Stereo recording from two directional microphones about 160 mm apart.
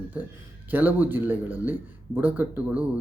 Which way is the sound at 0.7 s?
10° right (ahead or behind).